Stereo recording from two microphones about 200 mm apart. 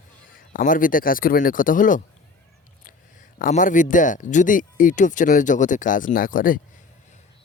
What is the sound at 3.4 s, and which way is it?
Speech, 40° left (ahead or behind).